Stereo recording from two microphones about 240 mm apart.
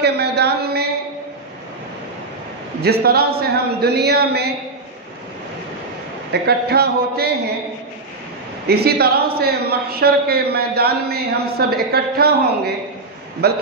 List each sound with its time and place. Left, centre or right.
0.0 s a sound: right
2.8 s a man's voice: right
6.4 s a man's voice: right
8.6 s a man's voice: right